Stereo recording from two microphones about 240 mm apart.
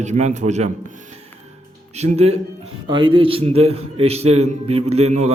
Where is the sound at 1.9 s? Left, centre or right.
Right.